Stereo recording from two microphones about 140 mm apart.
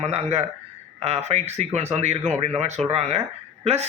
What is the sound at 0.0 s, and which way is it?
Speech, 50° right (ahead or behind).